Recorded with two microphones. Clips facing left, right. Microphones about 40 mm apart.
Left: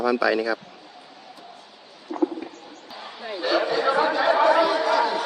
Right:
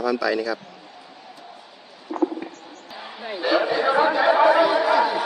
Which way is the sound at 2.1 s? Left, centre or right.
Centre.